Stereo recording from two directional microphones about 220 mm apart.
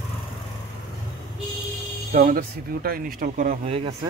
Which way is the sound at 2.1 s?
40° right (ahead or behind).